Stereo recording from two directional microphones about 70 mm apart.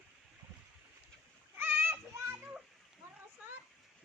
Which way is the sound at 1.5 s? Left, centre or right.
Right.